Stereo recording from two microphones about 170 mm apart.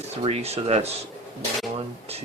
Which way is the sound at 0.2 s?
35° right (ahead or behind).